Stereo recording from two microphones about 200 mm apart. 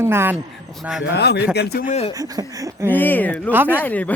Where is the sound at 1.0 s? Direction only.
55° left (ahead or behind).